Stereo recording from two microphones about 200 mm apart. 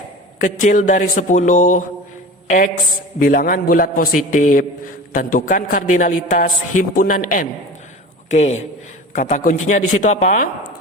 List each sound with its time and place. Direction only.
0.3 s a man's voice: 40° left (ahead or behind)